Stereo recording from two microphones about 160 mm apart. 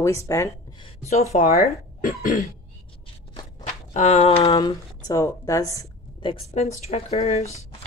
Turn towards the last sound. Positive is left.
turn(degrees=40)  # may be behind; listen again after turning